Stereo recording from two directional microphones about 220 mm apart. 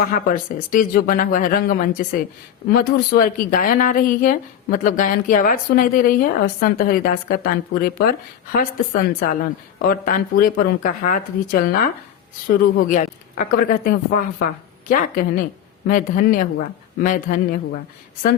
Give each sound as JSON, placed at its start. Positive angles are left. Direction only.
{"t": 0.0, "sound": "speech", "side_deg": 35}